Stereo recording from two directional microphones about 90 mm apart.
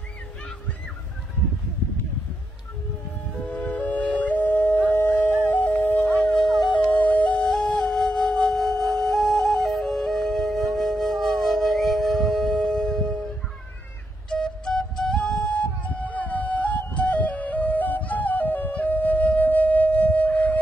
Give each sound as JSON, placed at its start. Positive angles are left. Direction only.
{"t": 3.4, "sound": "music", "side_deg": 15}
{"t": 6.2, "sound": "music", "side_deg": 5}
{"t": 6.9, "sound": "flute", "side_deg": 20}
{"t": 14.3, "sound": "flute", "side_deg": 5}